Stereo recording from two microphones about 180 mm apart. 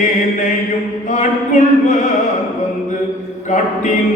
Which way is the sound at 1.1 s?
45° left (ahead or behind).